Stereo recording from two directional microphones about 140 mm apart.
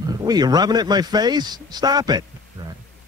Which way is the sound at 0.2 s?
30° right (ahead or behind).